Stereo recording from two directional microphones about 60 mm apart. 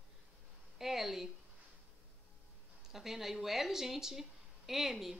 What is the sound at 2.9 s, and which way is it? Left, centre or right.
Speech, centre.